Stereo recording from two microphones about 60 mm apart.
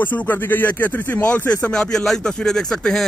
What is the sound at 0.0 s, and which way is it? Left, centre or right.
Speech, left.